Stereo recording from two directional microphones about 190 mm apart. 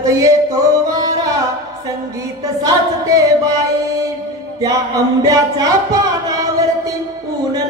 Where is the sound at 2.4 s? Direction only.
20° right (ahead or behind).